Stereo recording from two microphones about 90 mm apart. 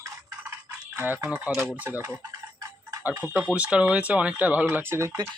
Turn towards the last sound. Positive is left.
turn(degrees=-25)  # may be behind; listen again after turning